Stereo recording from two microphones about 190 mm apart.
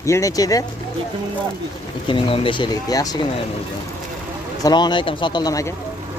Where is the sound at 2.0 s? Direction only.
25° left (ahead or behind).